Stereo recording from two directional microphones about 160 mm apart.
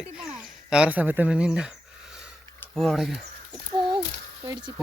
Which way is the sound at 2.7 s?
Centre (ahead or behind).